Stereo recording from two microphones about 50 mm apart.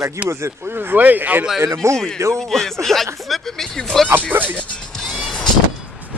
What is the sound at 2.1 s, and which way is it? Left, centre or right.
Speech, right.